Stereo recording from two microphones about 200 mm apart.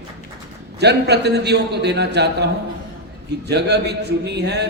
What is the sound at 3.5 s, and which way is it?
Speech, 55° right (ahead or behind).